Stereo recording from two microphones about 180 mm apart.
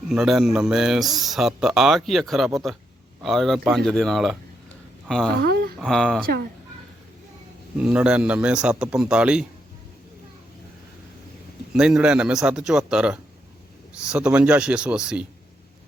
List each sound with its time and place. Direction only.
0.1 s speech: centre (ahead or behind)
5.4 s a sound: 60° right (ahead or behind)
5.8 s speech: 5° left (ahead or behind)
7.8 s speech: 5° right (ahead or behind)
11.7 s speech: 5° right (ahead or behind)